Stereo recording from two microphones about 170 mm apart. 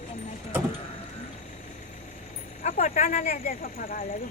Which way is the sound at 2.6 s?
45° left (ahead or behind).